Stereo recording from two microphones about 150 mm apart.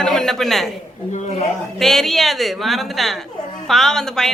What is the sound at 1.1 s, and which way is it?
Speech, 50° left (ahead or behind).